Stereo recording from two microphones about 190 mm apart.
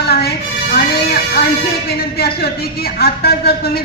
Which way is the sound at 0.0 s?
55° left (ahead or behind).